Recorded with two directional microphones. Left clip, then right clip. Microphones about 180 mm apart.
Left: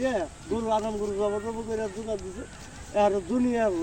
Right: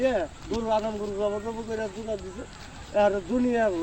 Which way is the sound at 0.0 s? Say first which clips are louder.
Right 3 dB; 15° right (ahead or behind).